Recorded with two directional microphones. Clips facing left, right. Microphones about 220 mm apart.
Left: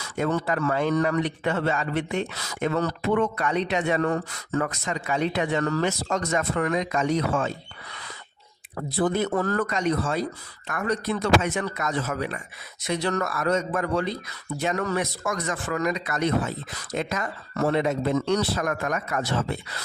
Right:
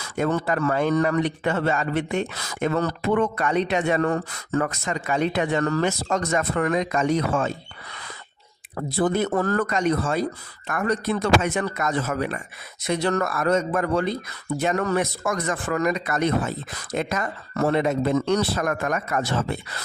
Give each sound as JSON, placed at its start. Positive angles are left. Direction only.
{"t": 0.2, "sound": "a man's voice", "side_deg": -50}
{"t": 9.0, "sound": "a man's voice", "side_deg": -50}